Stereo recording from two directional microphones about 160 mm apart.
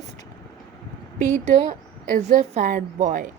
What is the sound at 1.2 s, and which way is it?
A woman's voice, 50° right (ahead or behind).